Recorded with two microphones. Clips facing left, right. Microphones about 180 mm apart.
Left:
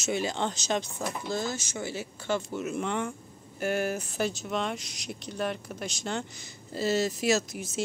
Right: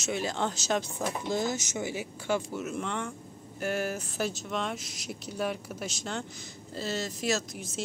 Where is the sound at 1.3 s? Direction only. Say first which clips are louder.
Right 2 dB; 20° right (ahead or behind).